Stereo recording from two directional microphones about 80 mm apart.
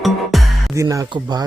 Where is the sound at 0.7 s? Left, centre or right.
Right.